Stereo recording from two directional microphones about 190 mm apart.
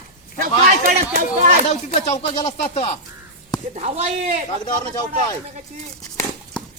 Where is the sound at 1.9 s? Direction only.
30° left (ahead or behind).